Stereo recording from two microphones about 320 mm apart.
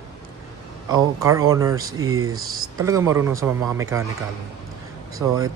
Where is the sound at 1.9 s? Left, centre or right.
Right.